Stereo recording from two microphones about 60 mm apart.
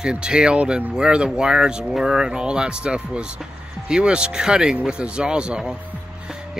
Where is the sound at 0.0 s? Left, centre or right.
Centre.